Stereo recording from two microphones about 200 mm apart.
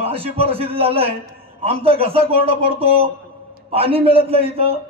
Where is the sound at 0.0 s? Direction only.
30° right (ahead or behind).